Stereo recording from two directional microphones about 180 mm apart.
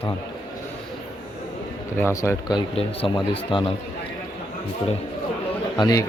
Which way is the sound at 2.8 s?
30° left (ahead or behind).